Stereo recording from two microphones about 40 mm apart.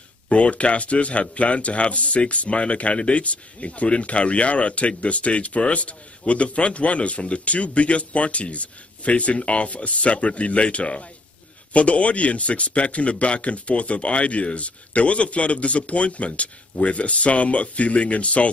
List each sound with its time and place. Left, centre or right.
0.3 s speech: left